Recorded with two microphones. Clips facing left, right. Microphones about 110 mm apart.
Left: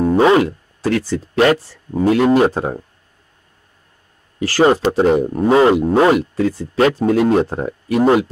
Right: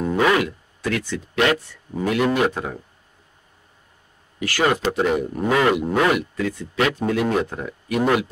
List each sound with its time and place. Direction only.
0.0 s speech: 30° left (ahead or behind)
4.4 s speech: 30° left (ahead or behind)